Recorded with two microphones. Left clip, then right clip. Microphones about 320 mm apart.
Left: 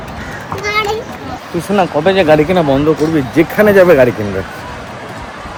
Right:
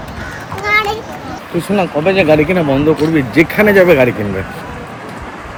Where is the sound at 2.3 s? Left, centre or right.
Centre.